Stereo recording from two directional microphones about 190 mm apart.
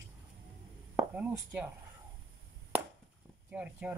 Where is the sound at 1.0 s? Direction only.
10° right (ahead or behind).